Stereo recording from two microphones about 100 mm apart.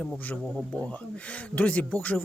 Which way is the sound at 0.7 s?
15° left (ahead or behind).